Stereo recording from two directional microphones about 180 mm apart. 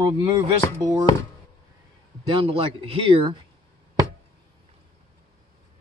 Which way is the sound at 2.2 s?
30° right (ahead or behind).